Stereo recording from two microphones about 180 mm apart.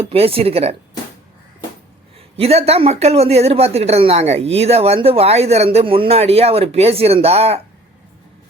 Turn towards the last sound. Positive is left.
turn(degrees=-35)  # may be behind; listen again after turning